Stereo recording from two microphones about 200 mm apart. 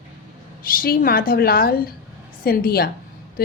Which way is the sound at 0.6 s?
45° left (ahead or behind).